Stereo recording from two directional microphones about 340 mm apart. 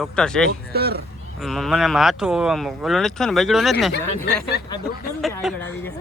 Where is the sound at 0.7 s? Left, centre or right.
Right.